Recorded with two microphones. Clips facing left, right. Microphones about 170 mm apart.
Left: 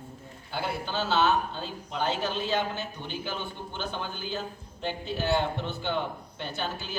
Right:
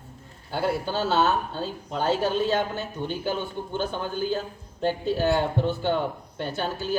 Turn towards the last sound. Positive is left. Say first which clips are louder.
# right 5 dB
turn(degrees=-45)  # may be behind; listen again after turning